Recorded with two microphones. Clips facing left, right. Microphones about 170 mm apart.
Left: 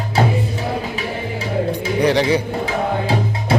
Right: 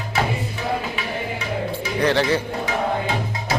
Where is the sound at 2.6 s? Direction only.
30° left (ahead or behind).